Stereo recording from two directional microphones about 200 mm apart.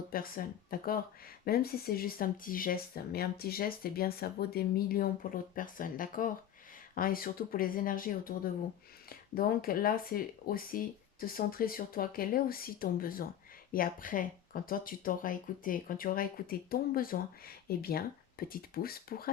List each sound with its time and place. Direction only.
0.1 s speech: 45° left (ahead or behind)